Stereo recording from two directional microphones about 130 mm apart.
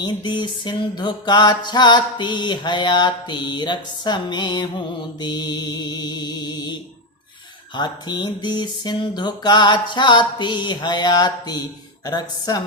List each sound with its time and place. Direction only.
0.0 s music: 35° left (ahead or behind)
7.8 s music: 35° left (ahead or behind)